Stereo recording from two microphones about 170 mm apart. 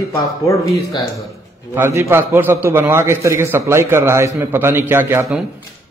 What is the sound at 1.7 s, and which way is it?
A man's voice, 15° right (ahead or behind).